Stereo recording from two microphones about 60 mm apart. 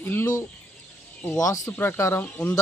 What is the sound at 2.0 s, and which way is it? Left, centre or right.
Speech, left.